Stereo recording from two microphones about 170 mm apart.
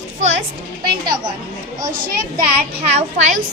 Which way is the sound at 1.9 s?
55° right (ahead or behind).